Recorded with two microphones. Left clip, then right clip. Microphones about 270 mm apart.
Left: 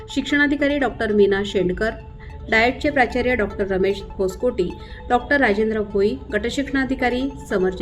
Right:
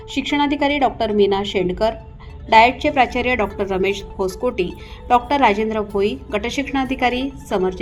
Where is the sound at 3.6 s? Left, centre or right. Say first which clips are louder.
Right 1 dB; centre.